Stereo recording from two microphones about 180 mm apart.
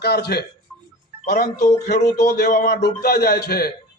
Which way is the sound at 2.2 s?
60° left (ahead or behind).